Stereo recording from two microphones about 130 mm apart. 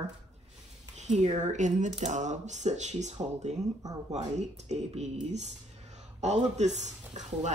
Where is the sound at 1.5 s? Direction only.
70° right (ahead or behind).